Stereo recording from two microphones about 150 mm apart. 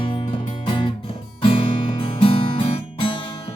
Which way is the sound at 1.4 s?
35° left (ahead or behind).